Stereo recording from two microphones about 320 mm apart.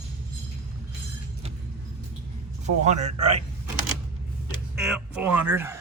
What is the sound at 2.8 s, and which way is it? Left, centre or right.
Speech, right.